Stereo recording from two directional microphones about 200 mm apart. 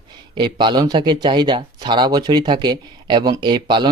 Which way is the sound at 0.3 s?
20° right (ahead or behind).